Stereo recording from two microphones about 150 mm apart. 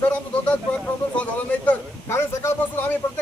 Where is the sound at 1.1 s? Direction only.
10° left (ahead or behind).